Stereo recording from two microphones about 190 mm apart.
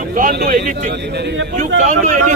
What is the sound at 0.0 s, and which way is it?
Speech, 45° right (ahead or behind).